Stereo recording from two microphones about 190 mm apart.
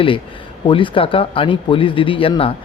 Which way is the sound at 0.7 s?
25° left (ahead or behind).